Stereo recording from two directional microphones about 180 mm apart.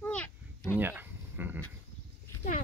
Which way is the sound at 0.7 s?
10° right (ahead or behind).